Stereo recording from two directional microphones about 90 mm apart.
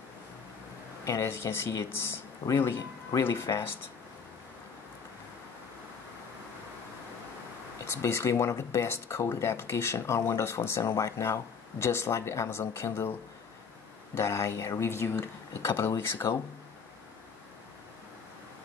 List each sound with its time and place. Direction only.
1.0 s speech: 30° left (ahead or behind)
7.8 s speech: 30° left (ahead or behind)
14.1 s speech: 30° left (ahead or behind)